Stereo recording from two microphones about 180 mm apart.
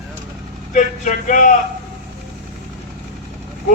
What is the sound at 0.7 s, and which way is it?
Speech, 45° left (ahead or behind).